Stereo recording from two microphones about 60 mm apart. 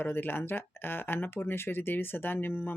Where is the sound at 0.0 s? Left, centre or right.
Left.